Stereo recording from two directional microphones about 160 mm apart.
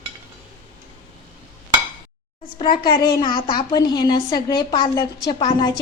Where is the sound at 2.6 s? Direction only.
30° left (ahead or behind).